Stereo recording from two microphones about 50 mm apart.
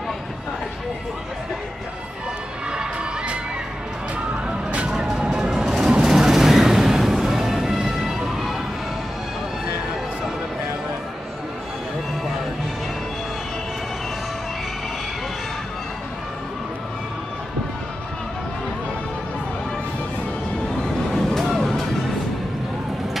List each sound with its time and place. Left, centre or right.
2.7 s crowd: centre
4.5 s vehicle: right
4.9 s a sound: centre
20.8 s vehicle: centre